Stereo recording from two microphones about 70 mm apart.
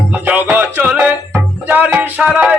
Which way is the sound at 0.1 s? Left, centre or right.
Right.